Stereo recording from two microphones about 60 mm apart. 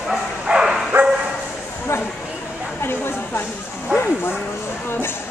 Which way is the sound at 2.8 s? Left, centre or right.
Left.